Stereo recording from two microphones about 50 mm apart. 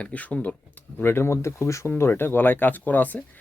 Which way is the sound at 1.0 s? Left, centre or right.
Left.